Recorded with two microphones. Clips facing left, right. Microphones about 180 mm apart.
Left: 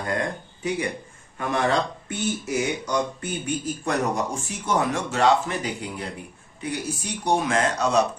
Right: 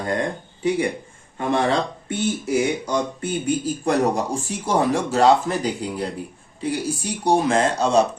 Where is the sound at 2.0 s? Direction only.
30° right (ahead or behind).